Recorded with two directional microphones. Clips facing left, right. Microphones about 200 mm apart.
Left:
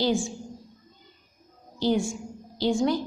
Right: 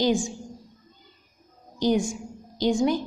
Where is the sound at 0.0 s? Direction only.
15° right (ahead or behind).